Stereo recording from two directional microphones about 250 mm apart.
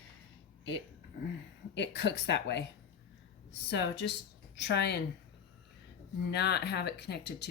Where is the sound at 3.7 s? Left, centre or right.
Left.